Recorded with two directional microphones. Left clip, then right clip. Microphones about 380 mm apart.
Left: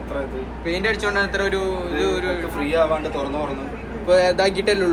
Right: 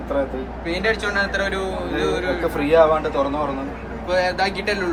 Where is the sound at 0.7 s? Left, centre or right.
Centre.